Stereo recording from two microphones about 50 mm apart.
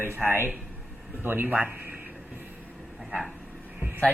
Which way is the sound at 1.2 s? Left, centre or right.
Right.